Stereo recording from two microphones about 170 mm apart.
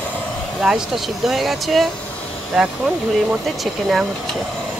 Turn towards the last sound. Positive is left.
turn(degrees=0)  # may be behind; listen again after turning